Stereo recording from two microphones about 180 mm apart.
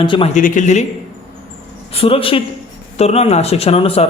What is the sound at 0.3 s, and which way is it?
Speech, 45° left (ahead or behind).